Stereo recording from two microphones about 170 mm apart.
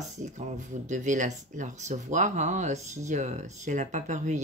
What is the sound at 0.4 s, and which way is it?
Speech, 45° right (ahead or behind).